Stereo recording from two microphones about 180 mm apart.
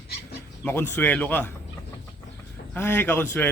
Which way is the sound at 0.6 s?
15° left (ahead or behind).